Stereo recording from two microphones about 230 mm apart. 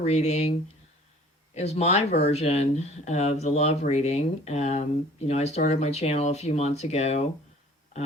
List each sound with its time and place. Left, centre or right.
0.0 s speech: left
1.5 s speech: left